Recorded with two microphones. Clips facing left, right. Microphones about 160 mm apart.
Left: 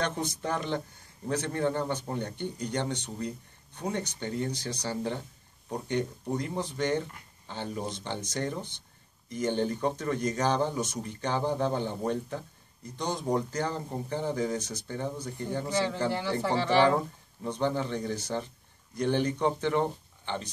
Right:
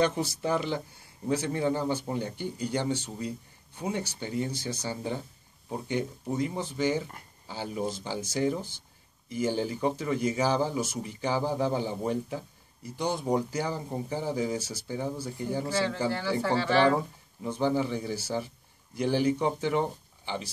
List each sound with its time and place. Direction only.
0.0 s speech: 10° right (ahead or behind)
15.7 s speech: 15° left (ahead or behind)
17.4 s speech: 5° right (ahead or behind)